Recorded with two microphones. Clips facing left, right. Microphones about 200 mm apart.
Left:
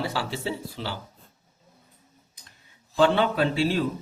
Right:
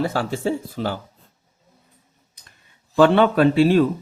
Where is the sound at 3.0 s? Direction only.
60° right (ahead or behind).